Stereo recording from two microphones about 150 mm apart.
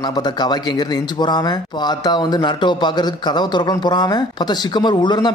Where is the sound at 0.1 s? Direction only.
30° left (ahead or behind).